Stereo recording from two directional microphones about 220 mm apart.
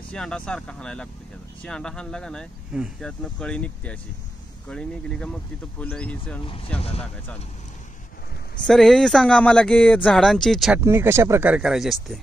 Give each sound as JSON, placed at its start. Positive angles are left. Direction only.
{"t": 0.1, "sound": "speech", "side_deg": 5}
{"t": 6.4, "sound": "speech", "side_deg": 25}
{"t": 8.6, "sound": "speech", "side_deg": 0}
{"t": 10.8, "sound": "speech", "side_deg": -10}